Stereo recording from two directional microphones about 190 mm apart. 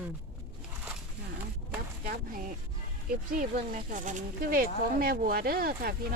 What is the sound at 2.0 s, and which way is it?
Speech, 45° right (ahead or behind).